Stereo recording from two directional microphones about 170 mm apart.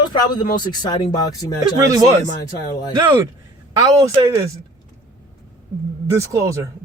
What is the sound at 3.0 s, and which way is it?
Speech, 20° right (ahead or behind).